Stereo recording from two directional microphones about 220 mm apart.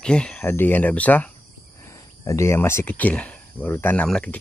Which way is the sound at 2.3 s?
10° left (ahead or behind).